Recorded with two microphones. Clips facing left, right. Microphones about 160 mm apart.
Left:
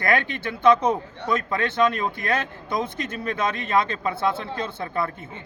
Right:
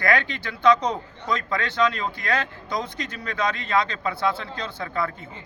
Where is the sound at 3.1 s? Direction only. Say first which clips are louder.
Left 1 dB; 20° left (ahead or behind).